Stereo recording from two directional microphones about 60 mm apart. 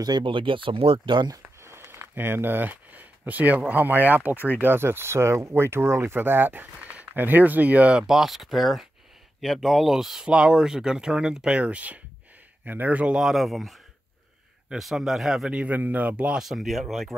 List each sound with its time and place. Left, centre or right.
0.1 s speech: right
1.6 s speech: right
8.1 s speech: centre
10.3 s speech: centre
11.5 s speech: right
13.1 s speech: centre
14.8 s speech: centre
15.5 s speech: right
16.3 s speech: centre